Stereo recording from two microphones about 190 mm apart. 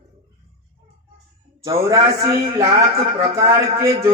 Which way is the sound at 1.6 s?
15° right (ahead or behind).